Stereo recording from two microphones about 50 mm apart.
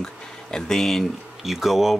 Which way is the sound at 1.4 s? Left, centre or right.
Centre.